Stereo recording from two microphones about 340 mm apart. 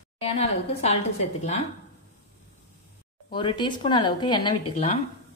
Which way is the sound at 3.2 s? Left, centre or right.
Centre.